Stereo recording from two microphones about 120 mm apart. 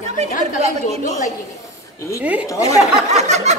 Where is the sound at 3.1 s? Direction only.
70° right (ahead or behind).